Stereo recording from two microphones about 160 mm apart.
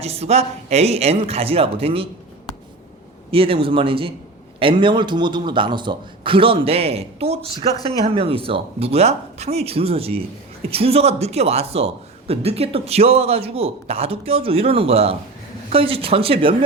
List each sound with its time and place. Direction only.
0.0 s a man's voice: 40° right (ahead or behind)
3.3 s a man's voice: 35° right (ahead or behind)